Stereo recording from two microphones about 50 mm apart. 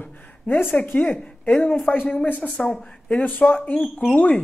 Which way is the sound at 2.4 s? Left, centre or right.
Left.